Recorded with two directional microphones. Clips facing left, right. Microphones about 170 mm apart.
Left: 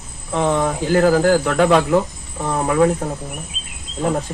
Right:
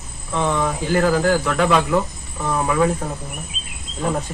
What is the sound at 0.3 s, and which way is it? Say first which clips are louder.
Speech: left 3 dB; 35° left (ahead or behind).